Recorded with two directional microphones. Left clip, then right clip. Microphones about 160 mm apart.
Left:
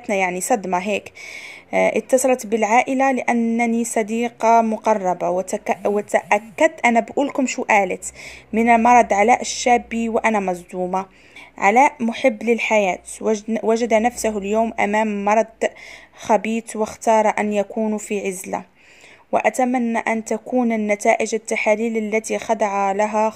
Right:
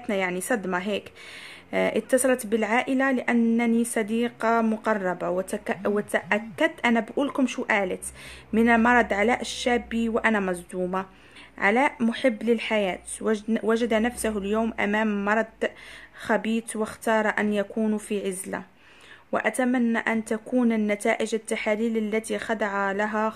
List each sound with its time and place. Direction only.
0.1 s a woman's voice: 15° left (ahead or behind)